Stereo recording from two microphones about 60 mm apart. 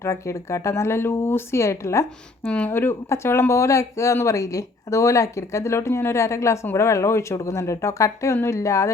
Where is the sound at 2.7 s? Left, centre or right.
Left.